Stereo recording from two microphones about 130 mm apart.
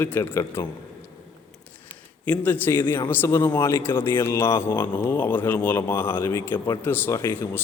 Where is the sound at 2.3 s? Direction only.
15° left (ahead or behind).